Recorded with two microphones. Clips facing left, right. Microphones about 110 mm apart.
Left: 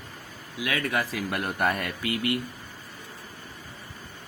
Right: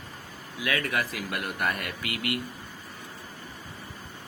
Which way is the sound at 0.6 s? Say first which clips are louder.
Left 1 dB; 25° left (ahead or behind).